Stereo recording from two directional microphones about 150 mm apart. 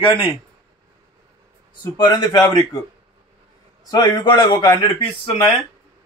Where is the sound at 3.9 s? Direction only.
25° left (ahead or behind).